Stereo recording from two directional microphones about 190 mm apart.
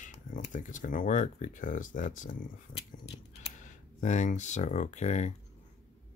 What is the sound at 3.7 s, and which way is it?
Speech, 40° left (ahead or behind).